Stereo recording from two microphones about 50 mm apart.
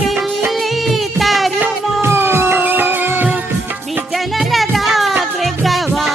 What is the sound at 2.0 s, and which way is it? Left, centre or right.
Music, right.